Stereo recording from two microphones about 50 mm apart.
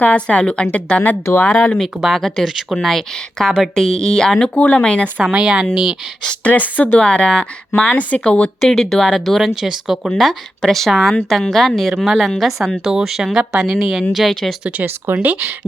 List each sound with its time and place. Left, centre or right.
0.0 s a woman's voice: left
1.4 s speech: left
2.0 s a woman's voice: centre
2.7 s a woman's voice: centre
4.5 s a woman's voice: left
5.3 s speech: centre
6.4 s speech: left
7.0 s a woman's voice: centre
8.6 s a woman's voice: centre
15.2 s speech: right